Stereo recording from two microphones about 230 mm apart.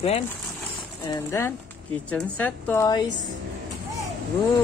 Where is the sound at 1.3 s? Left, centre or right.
Centre.